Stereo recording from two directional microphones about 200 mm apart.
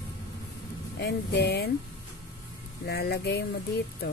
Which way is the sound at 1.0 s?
55° left (ahead or behind).